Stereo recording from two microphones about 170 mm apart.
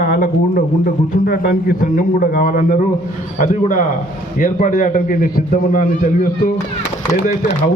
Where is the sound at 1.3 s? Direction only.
60° left (ahead or behind).